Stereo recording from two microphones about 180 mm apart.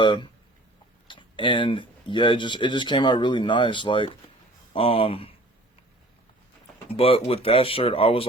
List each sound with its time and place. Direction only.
0.0 s speech: 25° left (ahead or behind)
6.9 s speech: 30° left (ahead or behind)